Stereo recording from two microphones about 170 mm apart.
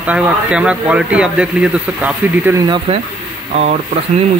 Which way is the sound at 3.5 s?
45° right (ahead or behind).